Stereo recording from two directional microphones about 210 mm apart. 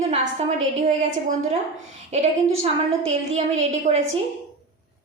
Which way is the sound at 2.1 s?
30° right (ahead or behind).